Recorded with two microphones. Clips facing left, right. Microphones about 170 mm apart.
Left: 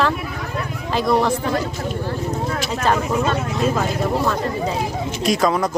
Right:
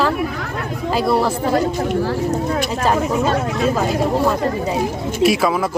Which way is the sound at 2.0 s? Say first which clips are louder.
Right 5 dB; 80° right.